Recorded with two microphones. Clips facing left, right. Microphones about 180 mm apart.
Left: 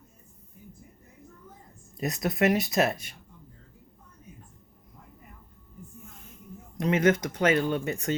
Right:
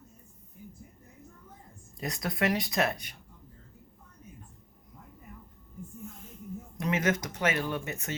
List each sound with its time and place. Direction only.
2.0 s speech: 20° left (ahead or behind)
6.7 s speech: 30° left (ahead or behind)